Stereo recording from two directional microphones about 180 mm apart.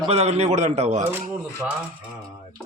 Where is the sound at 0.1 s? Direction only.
35° right (ahead or behind).